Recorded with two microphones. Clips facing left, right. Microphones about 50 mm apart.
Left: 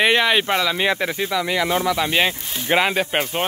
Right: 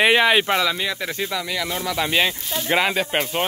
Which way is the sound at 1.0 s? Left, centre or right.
Centre.